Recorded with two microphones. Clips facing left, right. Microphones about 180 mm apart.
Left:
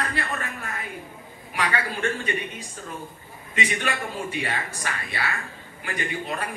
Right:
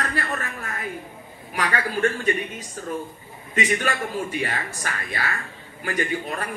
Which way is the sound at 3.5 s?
45° right (ahead or behind).